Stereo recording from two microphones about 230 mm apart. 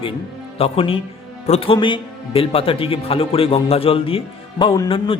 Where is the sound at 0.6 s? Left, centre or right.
Left.